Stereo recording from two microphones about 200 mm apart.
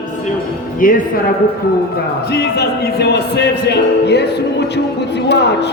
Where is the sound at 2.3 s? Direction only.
55° left (ahead or behind).